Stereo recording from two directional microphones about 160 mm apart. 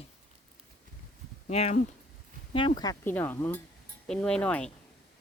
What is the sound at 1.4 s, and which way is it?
Speech, 45° left (ahead or behind).